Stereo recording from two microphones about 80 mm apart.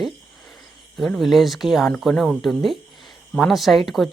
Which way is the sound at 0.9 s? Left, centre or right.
Centre.